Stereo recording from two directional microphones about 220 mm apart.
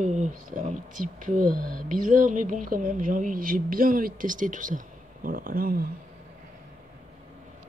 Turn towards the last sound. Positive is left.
turn(degrees=-40)  # may be behind; listen again after turning